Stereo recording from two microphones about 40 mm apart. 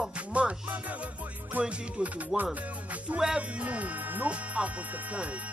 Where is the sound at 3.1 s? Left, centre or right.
Right.